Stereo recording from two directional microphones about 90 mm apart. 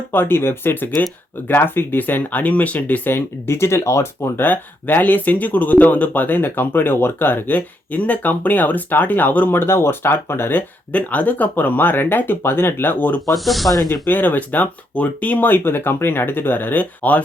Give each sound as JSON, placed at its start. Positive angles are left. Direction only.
{"t": 0.1, "sound": "speech", "side_deg": 25}
{"t": 13.3, "sound": "speech", "side_deg": 0}
{"t": 14.1, "sound": "speech", "side_deg": 20}